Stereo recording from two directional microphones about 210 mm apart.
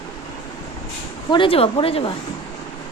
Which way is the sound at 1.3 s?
25° left (ahead or behind).